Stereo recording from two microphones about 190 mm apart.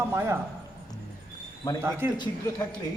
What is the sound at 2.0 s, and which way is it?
Speech, 10° right (ahead or behind).